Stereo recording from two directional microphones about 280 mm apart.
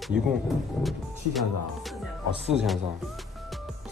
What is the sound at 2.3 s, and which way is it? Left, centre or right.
Speech, right.